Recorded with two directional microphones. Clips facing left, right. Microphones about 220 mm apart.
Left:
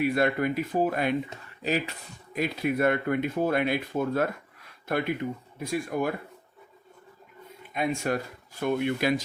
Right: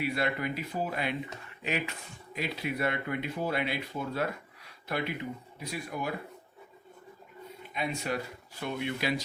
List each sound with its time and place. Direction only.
0.0 s speech: 50° left (ahead or behind)
1.6 s speech: 35° left (ahead or behind)
7.7 s speech: 50° left (ahead or behind)